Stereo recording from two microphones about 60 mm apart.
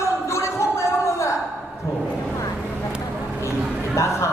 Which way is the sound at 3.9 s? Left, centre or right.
Left.